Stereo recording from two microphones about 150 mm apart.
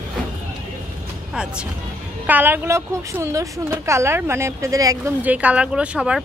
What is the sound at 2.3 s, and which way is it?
Speech, 10° right (ahead or behind).